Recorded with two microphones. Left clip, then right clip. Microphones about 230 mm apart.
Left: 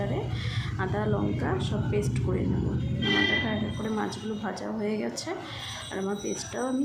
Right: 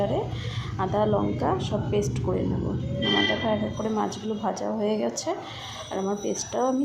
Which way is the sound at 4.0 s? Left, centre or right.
Centre.